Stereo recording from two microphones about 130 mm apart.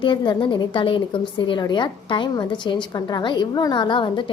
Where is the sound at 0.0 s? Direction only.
35° left (ahead or behind).